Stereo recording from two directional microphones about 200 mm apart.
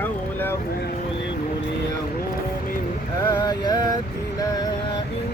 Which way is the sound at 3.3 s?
20° left (ahead or behind).